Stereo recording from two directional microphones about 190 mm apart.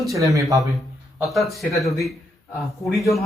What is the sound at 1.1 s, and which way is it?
Speech, centre (ahead or behind).